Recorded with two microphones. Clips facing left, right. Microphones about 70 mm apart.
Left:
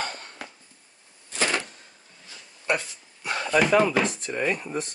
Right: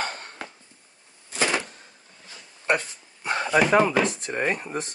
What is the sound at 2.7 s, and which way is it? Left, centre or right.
Speech, right.